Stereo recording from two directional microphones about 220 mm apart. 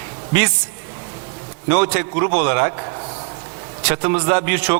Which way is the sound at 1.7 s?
15° right (ahead or behind).